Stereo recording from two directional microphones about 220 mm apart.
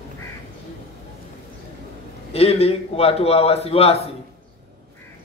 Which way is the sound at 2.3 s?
25° left (ahead or behind).